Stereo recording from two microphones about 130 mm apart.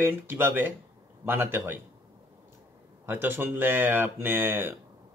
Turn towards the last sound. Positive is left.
turn(degrees=-15)  # may be behind; listen again after turning